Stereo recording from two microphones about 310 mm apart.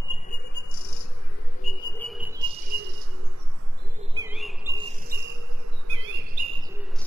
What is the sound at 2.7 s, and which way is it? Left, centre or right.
Cricket, right.